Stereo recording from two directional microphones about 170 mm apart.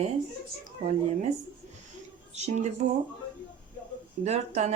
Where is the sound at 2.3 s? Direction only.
40° right (ahead or behind).